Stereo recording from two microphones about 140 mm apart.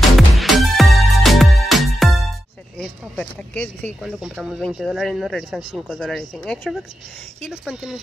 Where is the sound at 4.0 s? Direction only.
Centre (ahead or behind).